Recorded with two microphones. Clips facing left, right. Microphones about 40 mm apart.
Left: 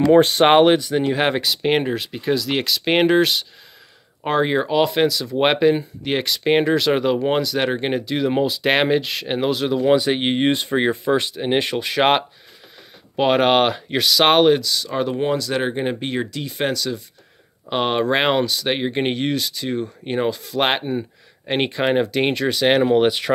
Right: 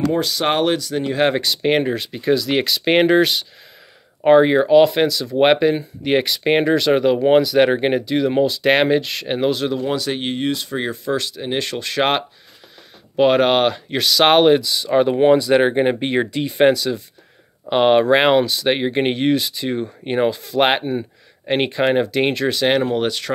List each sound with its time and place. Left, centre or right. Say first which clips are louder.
0.1 s speech: left 6 dB; left
0.6 s speech: left 5 dB; left
1.0 s speech: right 1 dB; centre
9.8 s speech: left 5 dB; centre; by 16.7 s right
16.7 s speech: right 3 dB; centre
22.8 s speech: left 4 dB; centre